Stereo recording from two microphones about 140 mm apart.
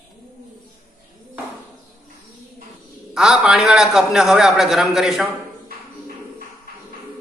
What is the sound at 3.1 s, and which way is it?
A man's voice, 5° right (ahead or behind).